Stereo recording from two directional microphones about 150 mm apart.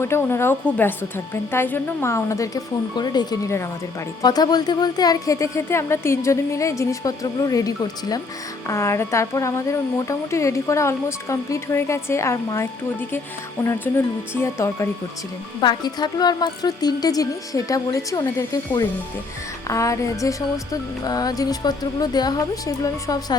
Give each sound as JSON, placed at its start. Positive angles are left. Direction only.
{"t": 0.0, "sound": "a woman's voice", "side_deg": 15}
{"t": 13.7, "sound": "a woman's voice", "side_deg": 15}